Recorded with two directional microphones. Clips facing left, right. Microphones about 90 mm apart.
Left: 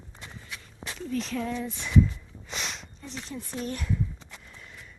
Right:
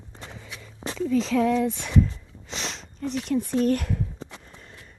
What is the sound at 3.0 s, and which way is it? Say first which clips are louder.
Speech: right 17 dB; 65° right (ahead or behind).